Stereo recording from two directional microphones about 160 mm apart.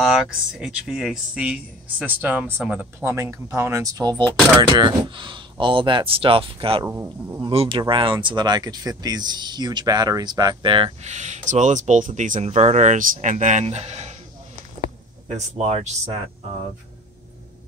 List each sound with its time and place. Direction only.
0.0 s speech: centre (ahead or behind); by 6.9 s 35° right (ahead or behind)
6.9 s speech: 15° right (ahead or behind)
7.4 s speech: 30° right (ahead or behind)
11.0 s speech: 45° right (ahead or behind)
15.3 s speech: 45° right (ahead or behind)